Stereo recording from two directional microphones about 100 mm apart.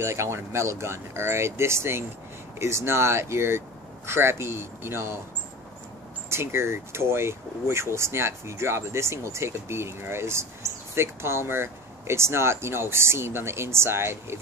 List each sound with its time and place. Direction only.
0.0 s speech: 30° right (ahead or behind)
6.3 s speech: 25° right (ahead or behind)